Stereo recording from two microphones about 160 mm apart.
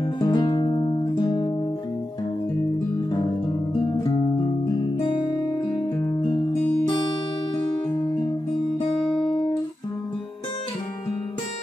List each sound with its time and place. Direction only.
0.0 s guitar: 30° left (ahead or behind)
5.0 s music: 30° left (ahead or behind)
9.1 s guitar: 35° left (ahead or behind)